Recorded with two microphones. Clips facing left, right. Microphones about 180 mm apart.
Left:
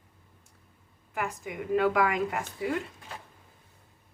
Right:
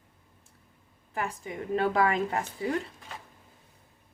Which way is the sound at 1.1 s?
30° right (ahead or behind).